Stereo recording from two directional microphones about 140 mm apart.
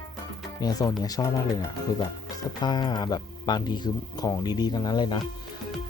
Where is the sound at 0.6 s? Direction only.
25° left (ahead or behind).